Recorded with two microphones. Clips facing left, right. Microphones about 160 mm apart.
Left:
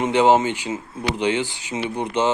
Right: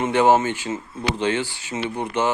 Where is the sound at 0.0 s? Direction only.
15° left (ahead or behind).